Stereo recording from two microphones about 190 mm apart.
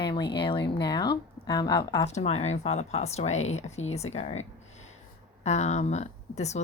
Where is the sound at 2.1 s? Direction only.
35° left (ahead or behind).